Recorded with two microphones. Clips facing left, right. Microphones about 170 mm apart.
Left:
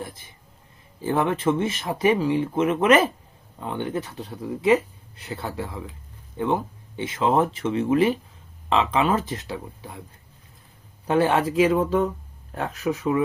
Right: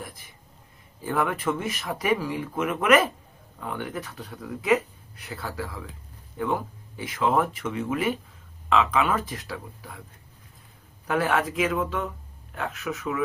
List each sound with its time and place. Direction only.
1.0 s speech: 25° left (ahead or behind)
11.0 s speech: 25° left (ahead or behind)